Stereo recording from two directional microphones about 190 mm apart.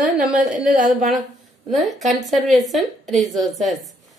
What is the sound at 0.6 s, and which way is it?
Speech, 45° right (ahead or behind).